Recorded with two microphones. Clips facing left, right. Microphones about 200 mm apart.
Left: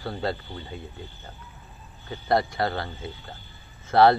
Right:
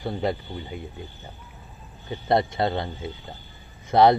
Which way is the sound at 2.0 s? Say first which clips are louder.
Right 2 dB; 20° right (ahead or behind).